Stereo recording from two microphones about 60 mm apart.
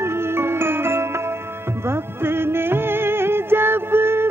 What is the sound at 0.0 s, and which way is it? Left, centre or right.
Music, right.